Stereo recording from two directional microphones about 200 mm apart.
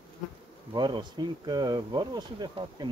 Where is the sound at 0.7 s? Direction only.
20° right (ahead or behind).